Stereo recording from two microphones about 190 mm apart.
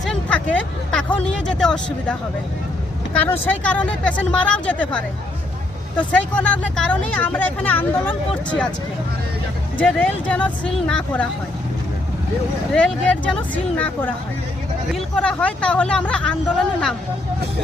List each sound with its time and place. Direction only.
0.0 s hubbub: 5° left (ahead or behind)
1.3 s speech: 5° left (ahead or behind)
9.7 s speech: 5° left (ahead or behind)
12.7 s speech: 5° left (ahead or behind)